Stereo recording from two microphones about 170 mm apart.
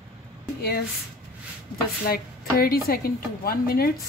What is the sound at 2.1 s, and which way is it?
Speech, 60° left (ahead or behind).